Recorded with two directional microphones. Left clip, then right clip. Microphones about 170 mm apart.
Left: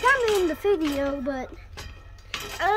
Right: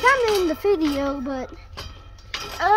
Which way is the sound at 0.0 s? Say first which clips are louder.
Right 3 dB; 20° right (ahead or behind).